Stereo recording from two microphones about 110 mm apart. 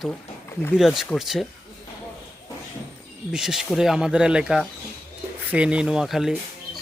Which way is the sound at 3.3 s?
5° right (ahead or behind).